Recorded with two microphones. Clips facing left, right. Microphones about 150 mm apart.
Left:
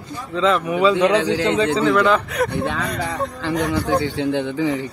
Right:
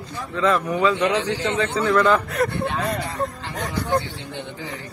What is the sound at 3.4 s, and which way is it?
A man's voice, 90° left.